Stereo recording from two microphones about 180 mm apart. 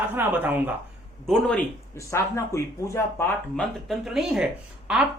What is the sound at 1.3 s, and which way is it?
Speech, 5° left (ahead or behind).